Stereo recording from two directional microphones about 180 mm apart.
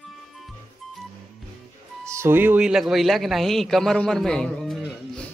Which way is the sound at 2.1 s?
15° right (ahead or behind).